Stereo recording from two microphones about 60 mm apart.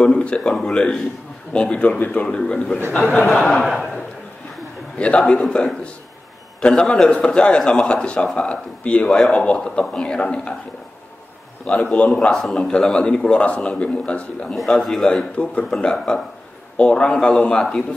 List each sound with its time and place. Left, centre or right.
0.0 s a man's voice: centre
3.3 s a man's voice: centre
4.9 s a man's voice: centre
9.1 s a man's voice: centre
11.6 s a man's voice: left
12.4 s a man's voice: centre
14.5 s a man's voice: centre
15.3 s a man's voice: centre